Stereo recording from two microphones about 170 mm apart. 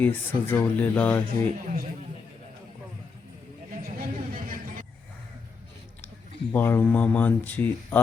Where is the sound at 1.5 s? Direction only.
55° right (ahead or behind).